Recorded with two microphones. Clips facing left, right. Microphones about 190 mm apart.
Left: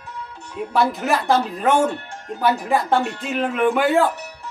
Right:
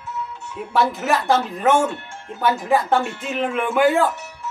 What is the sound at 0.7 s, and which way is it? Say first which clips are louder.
Speech: even; centre (ahead or behind).